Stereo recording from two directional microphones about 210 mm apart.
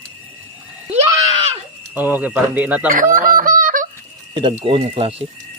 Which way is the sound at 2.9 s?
40° right (ahead or behind).